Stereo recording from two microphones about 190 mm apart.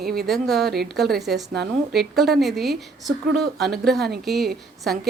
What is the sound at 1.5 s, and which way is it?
Speech, 55° right (ahead or behind).